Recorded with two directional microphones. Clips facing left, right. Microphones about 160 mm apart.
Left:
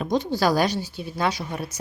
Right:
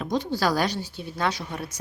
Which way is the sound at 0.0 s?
15° left (ahead or behind).